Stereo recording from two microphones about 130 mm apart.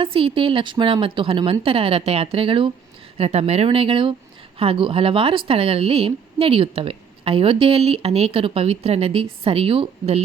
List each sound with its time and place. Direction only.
0.0 s a woman's voice: 45° right (ahead or behind)
3.2 s a woman's voice: 55° right (ahead or behind)